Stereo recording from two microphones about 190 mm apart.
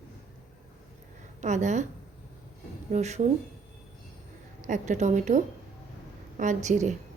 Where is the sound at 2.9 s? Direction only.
35° right (ahead or behind).